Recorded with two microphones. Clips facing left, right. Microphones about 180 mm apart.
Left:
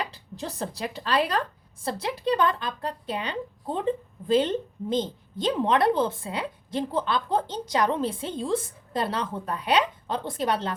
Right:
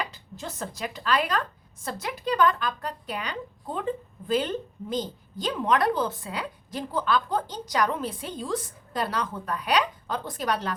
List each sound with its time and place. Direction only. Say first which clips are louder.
0.1 s a woman's voice: left 3 dB; 35° left (ahead or behind)